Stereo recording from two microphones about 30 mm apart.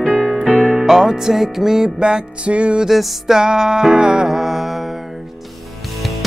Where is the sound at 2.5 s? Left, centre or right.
Right.